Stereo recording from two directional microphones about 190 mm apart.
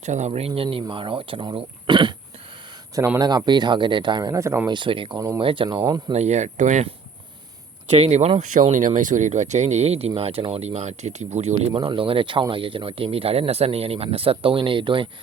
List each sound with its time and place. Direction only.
0.0 s speech: 35° right (ahead or behind); by 6.1 s 20° right (ahead or behind)
6.1 s speech: 35° right (ahead or behind)
7.9 s speech: 35° right (ahead or behind)